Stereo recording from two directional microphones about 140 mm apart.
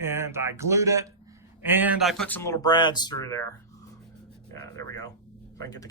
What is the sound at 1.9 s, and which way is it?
Speech, centre (ahead or behind).